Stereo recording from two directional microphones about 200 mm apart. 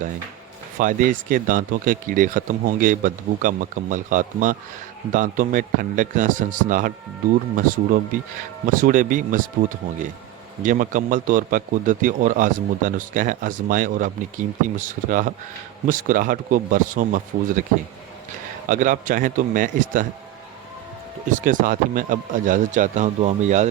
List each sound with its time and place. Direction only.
0.8 s speech: 40° right (ahead or behind)
10.6 s speech: 40° right (ahead or behind)
18.7 s speech: 40° right (ahead or behind)
21.2 s speech: 40° right (ahead or behind)